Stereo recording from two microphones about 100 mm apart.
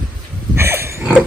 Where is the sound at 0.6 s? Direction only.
25° right (ahead or behind).